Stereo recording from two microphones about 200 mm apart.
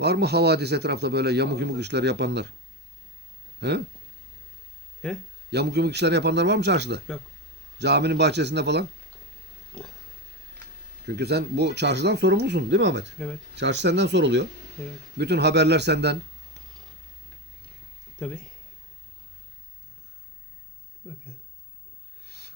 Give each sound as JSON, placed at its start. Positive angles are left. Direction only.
{"t": 0.0, "sound": "speech", "side_deg": -55}
{"t": 3.6, "sound": "speech", "side_deg": -60}
{"t": 5.0, "sound": "speech", "side_deg": 5}
{"t": 5.5, "sound": "speech", "side_deg": -55}
{"t": 11.0, "sound": "speech", "side_deg": -55}
{"t": 22.3, "sound": "a sound", "side_deg": -55}